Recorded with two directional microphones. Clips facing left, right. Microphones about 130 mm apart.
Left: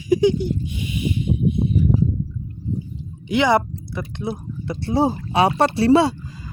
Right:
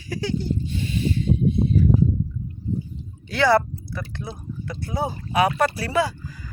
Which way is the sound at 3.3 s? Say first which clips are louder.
Left 1 dB; 20° left (ahead or behind).